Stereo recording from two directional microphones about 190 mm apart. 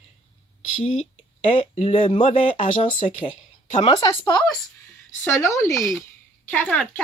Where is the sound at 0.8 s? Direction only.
35° left (ahead or behind).